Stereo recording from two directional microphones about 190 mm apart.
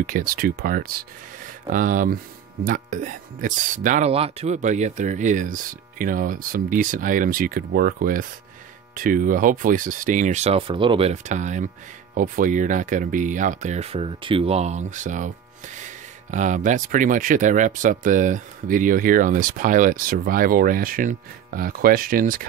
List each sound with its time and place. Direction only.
0.0 s speech: 45° right (ahead or behind)